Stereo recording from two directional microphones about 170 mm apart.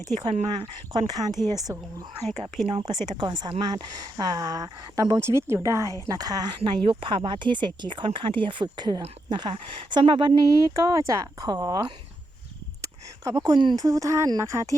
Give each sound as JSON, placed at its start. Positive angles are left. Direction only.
{"t": 0.9, "sound": "speech", "side_deg": -25}
{"t": 2.6, "sound": "a woman's voice", "side_deg": -35}
{"t": 3.2, "sound": "speech", "side_deg": -25}